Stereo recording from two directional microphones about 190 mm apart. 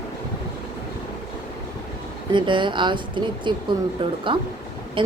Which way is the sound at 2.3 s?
25° right (ahead or behind).